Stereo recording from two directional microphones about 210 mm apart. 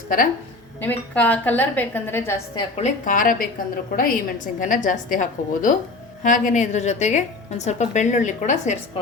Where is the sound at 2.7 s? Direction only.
35° left (ahead or behind).